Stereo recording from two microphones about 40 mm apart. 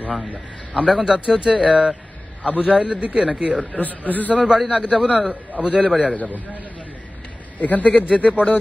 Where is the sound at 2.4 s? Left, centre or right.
Left.